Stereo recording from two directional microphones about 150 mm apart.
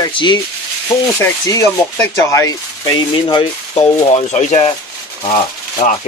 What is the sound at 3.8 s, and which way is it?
Speech, 45° left (ahead or behind).